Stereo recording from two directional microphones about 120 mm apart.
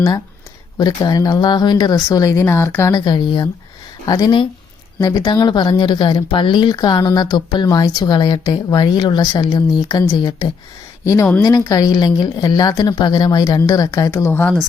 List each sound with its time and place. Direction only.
0.8 s speech: 35° left (ahead or behind)
2.9 s speech: 35° left (ahead or behind)
11.0 s speech: 25° left (ahead or behind)